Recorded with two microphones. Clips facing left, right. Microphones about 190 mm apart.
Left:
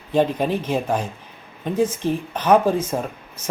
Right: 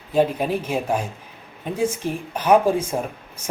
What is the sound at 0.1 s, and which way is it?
Speech, 10° right (ahead or behind).